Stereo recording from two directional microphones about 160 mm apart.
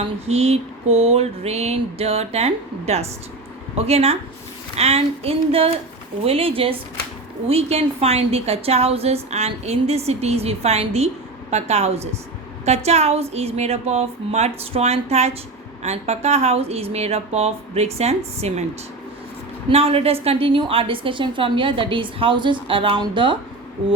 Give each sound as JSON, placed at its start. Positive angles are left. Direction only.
{"t": 0.0, "sound": "a woman's voice", "side_deg": -40}
{"t": 19.7, "sound": "a woman's voice", "side_deg": -40}